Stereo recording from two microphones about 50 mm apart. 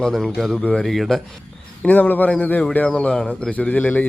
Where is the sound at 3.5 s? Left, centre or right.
Left.